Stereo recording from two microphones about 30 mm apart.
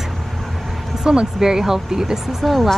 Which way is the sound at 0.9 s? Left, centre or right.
Right.